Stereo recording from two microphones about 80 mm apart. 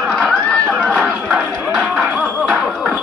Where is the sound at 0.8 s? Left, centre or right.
Centre.